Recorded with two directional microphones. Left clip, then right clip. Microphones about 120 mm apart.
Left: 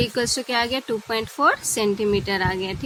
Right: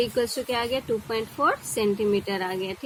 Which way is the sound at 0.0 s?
35° left (ahead or behind).